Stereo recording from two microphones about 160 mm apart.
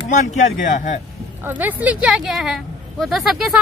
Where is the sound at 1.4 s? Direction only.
10° right (ahead or behind).